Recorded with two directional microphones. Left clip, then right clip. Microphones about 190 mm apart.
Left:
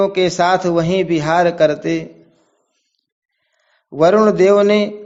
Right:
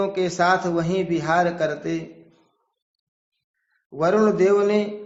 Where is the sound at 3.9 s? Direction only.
40° left (ahead or behind).